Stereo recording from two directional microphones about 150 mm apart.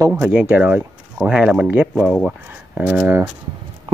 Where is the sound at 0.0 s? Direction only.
10° right (ahead or behind).